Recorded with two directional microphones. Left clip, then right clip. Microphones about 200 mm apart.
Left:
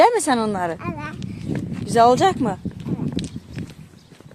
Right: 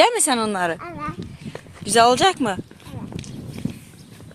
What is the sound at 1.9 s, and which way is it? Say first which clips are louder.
Speech: even; 10° left (ahead or behind).